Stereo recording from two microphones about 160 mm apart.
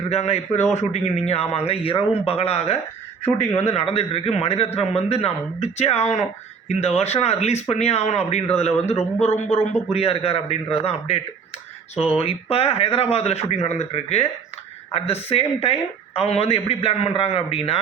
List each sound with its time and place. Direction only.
0.1 s a man's voice: 40° left (ahead or behind)
3.2 s speech: 15° left (ahead or behind)
3.7 s a man's voice: 40° left (ahead or behind)